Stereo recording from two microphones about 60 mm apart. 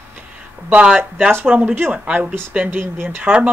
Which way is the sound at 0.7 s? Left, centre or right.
Right.